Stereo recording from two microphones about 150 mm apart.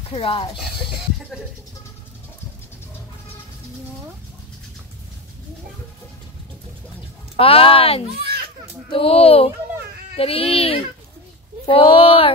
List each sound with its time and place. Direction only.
0.1 s speech: 40° left (ahead or behind)
7.3 s speech: 40° left (ahead or behind)
8.1 s children playing: 90° right
8.9 s speech: 40° left (ahead or behind)